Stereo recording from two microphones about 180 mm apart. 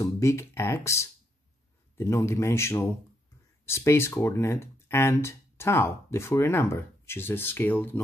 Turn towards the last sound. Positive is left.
turn(degrees=10)  # may be behind; listen again after turning